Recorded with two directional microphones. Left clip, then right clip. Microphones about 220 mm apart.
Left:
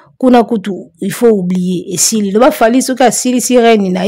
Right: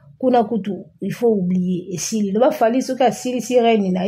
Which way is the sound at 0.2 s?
45° left (ahead or behind).